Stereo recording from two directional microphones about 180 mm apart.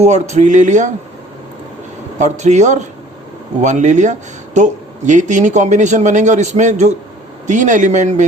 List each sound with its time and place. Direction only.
0.0 s speech: 40° right (ahead or behind)
2.1 s speech: 40° right (ahead or behind)